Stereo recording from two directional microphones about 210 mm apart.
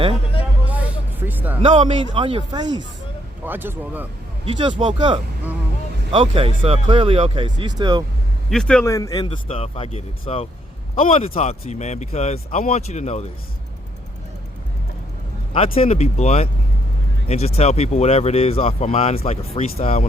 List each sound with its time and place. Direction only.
0.6 s music: 5° right (ahead or behind)
1.6 s speech: 25° right (ahead or behind)
3.4 s speech: 10° right (ahead or behind)
4.8 s speech: 20° right (ahead or behind)
8.4 s a man's voice: 5° left (ahead or behind)
8.9 s speech: 15° left (ahead or behind); by 13.2 s 35° left (ahead or behind)
15.5 s speech: 25° left (ahead or behind)